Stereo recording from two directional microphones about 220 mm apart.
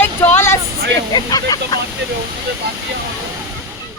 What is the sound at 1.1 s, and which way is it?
Speech, 15° left (ahead or behind).